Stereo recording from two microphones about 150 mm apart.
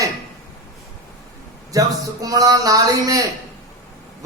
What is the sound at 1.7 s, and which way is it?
A man's voice, 25° right (ahead or behind).